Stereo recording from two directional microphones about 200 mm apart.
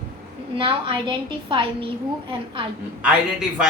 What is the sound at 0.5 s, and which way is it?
A woman's voice, 25° right (ahead or behind).